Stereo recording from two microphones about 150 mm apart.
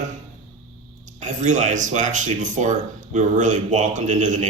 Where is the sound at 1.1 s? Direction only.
55° right (ahead or behind).